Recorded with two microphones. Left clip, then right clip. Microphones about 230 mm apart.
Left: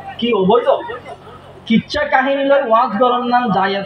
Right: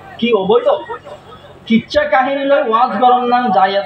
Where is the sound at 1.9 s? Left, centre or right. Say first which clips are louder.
Right 2 dB; left.